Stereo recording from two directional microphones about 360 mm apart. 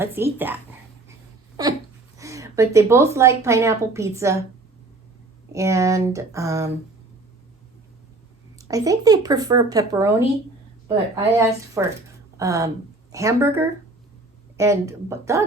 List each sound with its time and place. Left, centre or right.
0.0 s speech: centre
5.5 s speech: centre
8.5 s speech: centre
11.3 s a woman's voice: centre